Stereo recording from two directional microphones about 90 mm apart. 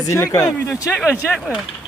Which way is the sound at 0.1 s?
40° left (ahead or behind).